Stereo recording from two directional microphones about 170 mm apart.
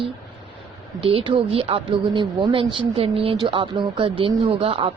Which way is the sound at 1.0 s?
35° right (ahead or behind).